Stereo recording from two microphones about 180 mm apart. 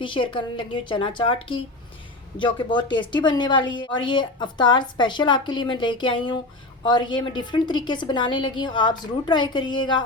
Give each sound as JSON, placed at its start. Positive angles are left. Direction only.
{"t": 0.0, "sound": "a woman's voice", "side_deg": 25}